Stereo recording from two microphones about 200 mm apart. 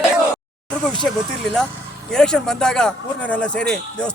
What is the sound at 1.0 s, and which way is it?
Speech, 5° left (ahead or behind).